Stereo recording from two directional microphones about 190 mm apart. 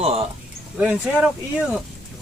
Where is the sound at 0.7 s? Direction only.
10° right (ahead or behind).